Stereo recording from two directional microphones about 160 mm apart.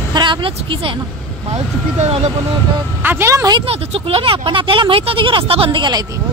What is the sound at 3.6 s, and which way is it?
Speech, 40° right (ahead or behind).